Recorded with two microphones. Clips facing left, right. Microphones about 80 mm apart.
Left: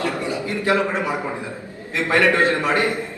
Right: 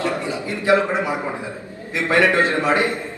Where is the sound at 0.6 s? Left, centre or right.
Right.